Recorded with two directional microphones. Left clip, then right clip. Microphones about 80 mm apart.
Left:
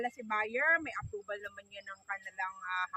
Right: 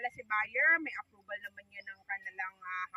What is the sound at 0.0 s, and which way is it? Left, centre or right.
Speech, centre.